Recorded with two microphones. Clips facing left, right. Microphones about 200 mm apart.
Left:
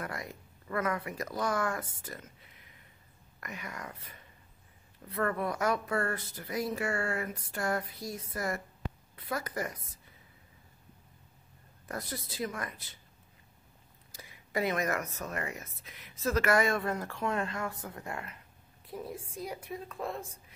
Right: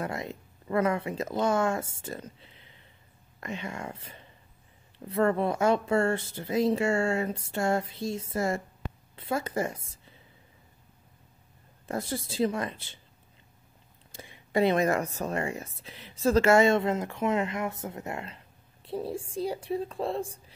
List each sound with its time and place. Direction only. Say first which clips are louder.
0.0 s a woman's voice: right 6 dB; 25° right (ahead or behind)
11.8 s speech: right 7 dB; 25° right (ahead or behind)
14.1 s a woman's voice: right 7 dB; 25° right (ahead or behind)